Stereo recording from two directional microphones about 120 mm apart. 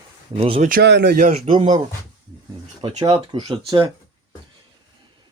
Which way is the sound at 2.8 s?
55° right (ahead or behind).